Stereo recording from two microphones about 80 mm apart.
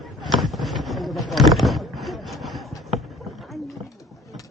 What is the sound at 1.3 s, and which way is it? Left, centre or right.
Speech, centre.